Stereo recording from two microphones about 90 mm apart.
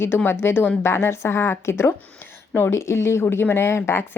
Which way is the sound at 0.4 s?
20° left (ahead or behind).